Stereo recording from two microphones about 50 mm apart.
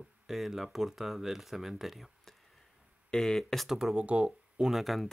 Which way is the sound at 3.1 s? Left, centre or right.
Centre.